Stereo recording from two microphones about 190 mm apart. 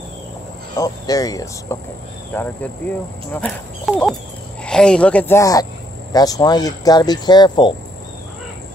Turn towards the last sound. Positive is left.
turn(degrees=25)  # may be behind; listen again after turning